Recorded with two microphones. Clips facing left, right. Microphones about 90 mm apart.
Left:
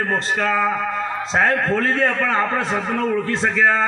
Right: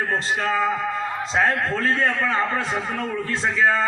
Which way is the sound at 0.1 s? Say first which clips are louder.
Left 3 dB; 50° left (ahead or behind).